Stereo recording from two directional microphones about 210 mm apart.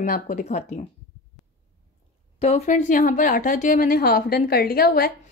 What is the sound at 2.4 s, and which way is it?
A woman's voice, 35° left (ahead or behind).